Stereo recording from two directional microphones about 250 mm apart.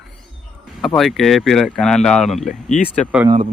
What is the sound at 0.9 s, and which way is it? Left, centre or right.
Speech, centre.